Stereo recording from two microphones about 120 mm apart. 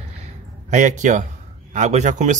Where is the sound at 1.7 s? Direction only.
75° right (ahead or behind).